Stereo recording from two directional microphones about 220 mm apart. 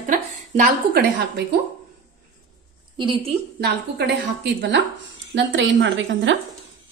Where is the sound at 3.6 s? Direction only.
50° right (ahead or behind).